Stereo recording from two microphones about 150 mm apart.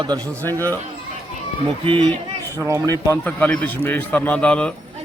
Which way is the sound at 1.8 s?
35° right (ahead or behind).